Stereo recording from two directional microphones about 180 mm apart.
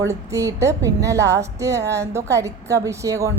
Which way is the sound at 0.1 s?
15° right (ahead or behind).